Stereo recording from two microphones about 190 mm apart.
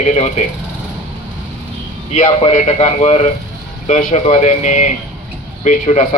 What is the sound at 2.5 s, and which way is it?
Speech, 35° left (ahead or behind).